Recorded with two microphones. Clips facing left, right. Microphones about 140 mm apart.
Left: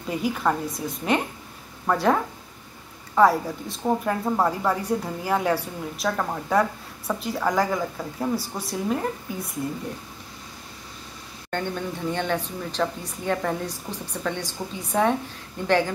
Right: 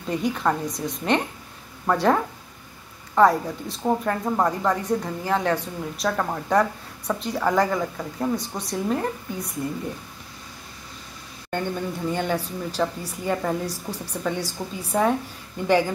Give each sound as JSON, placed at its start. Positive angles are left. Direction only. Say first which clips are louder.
{"t": 0.1, "sound": "a woman's voice", "louder": "right 1 dB", "side_deg": 5}
{"t": 11.5, "sound": "speech", "louder": "right 1 dB", "side_deg": -10}